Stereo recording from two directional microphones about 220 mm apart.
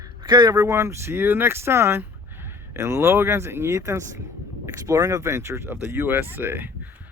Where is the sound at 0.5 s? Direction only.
10° right (ahead or behind).